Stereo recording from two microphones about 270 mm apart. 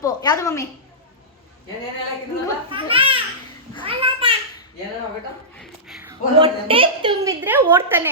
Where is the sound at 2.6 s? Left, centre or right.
Centre.